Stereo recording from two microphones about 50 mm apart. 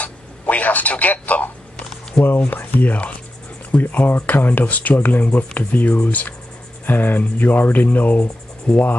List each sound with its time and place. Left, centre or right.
0.0 s telephone: left
2.2 s speech: left